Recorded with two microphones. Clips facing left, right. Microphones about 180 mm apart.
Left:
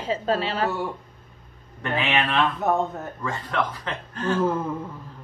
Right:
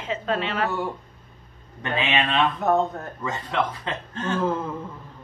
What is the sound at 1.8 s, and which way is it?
Speech, 20° right (ahead or behind).